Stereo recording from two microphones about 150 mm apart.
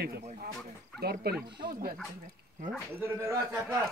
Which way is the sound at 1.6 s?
80° right.